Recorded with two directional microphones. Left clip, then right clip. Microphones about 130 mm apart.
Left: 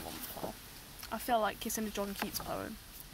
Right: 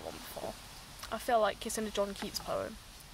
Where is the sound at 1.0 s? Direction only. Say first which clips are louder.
Right 3 dB; 15° right (ahead or behind).